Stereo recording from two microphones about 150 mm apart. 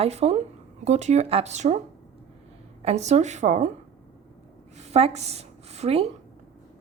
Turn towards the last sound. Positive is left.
turn(degrees=-45)  # may be behind; listen again after turning